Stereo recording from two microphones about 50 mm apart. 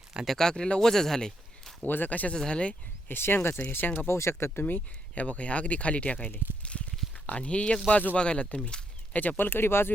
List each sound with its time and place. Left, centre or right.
0.3 s speech: centre
1.9 s speech: left
2.3 s speech: centre
3.1 s speech: left
3.7 s speech: left
4.1 s speech: left
5.1 s speech: left
6.7 s a sound: left
7.3 s speech: left
9.4 s speech: left